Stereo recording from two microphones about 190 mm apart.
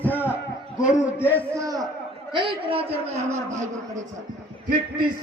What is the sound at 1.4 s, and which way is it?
Speech, 15° right (ahead or behind).